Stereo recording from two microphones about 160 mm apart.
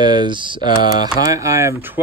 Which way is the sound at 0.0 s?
25° right (ahead or behind).